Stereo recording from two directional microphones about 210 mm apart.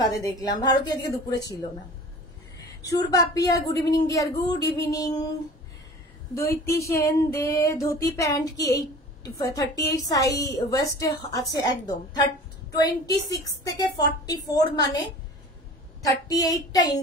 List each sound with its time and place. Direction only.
0.0 s a woman's voice: 15° left (ahead or behind)
2.9 s a woman's voice: 15° left (ahead or behind)
6.3 s a woman's voice: 15° left (ahead or behind)